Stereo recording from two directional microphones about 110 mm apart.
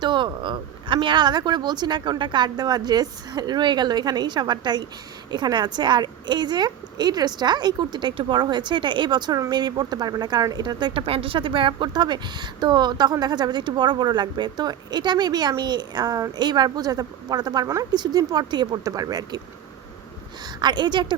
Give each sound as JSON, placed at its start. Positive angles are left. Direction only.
{"t": 0.0, "sound": "a woman's voice", "side_deg": -45}
{"t": 20.4, "sound": "a woman's voice", "side_deg": -40}